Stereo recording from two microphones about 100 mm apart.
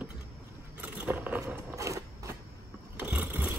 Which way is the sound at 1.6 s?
30° right (ahead or behind).